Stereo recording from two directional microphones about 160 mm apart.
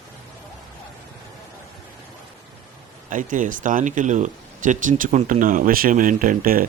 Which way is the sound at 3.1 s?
55° right (ahead or behind).